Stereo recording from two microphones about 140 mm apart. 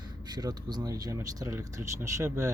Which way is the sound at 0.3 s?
30° right (ahead or behind).